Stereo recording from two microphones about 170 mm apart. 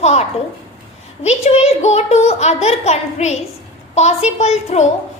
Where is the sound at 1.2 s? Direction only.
40° left (ahead or behind).